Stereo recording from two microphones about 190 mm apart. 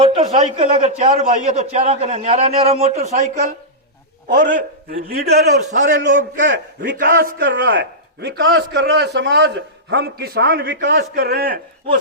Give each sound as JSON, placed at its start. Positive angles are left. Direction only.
{"t": 0.0, "sound": "a man's voice", "side_deg": -30}
{"t": 7.4, "sound": "a man's voice", "side_deg": -75}
{"t": 11.2, "sound": "a man's voice", "side_deg": -55}